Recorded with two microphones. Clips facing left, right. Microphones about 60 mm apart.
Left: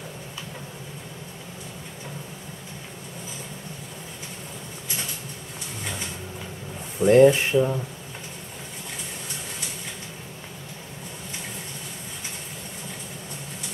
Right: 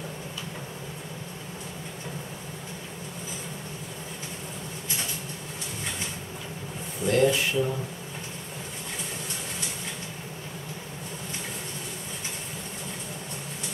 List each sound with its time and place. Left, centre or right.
7.0 s speech: left